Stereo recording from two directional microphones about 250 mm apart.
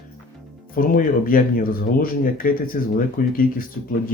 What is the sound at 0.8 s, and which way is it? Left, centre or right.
Speech, left.